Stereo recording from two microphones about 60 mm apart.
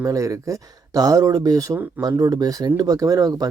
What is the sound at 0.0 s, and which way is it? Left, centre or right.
Speech, right.